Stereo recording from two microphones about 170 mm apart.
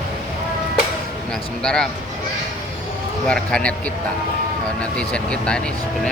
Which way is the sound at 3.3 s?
5° left (ahead or behind).